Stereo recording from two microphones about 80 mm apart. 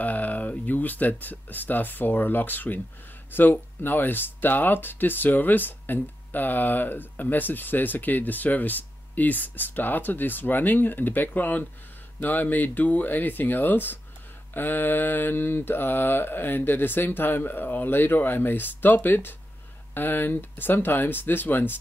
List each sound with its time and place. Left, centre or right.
0.0 s speech: left